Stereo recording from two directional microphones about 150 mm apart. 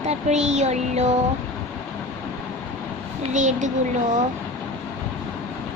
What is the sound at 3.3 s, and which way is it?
Speech, 55° right (ahead or behind).